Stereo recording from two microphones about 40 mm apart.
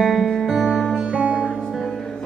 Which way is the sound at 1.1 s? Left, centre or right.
Right.